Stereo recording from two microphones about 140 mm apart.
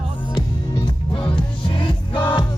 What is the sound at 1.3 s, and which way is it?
Music, 40° left (ahead or behind).